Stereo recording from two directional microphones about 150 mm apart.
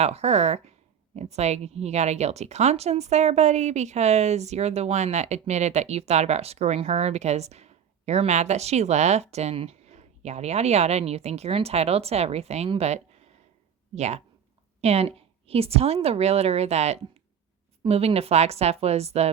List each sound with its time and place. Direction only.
0.0 s a woman's voice: 45° right (ahead or behind)